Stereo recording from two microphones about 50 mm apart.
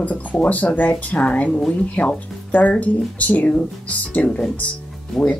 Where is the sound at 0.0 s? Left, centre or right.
Left.